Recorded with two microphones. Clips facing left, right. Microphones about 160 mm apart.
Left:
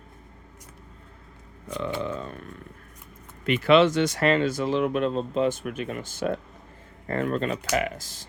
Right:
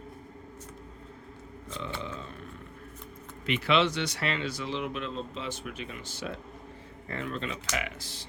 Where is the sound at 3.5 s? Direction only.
45° left (ahead or behind).